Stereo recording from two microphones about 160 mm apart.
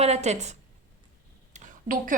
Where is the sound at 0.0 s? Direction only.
45° right (ahead or behind).